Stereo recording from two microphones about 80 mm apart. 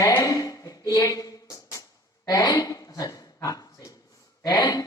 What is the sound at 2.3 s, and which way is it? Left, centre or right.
Dog, left.